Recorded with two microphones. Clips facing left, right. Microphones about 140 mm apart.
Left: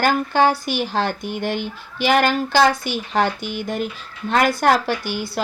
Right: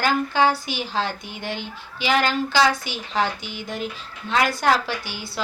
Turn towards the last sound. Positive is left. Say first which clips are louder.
# left 6 dB
turn(degrees=50)  # may be behind; listen again after turning